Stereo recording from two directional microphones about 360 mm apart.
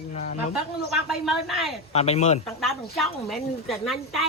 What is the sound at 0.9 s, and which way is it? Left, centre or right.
Speech, centre.